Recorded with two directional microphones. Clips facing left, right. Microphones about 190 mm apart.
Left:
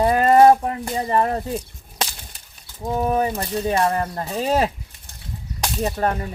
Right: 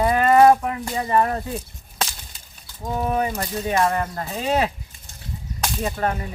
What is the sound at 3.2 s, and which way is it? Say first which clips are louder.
Speech: left 2 dB; 35° left (ahead or behind).